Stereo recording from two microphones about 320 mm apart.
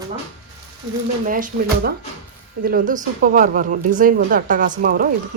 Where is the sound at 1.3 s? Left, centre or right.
Right.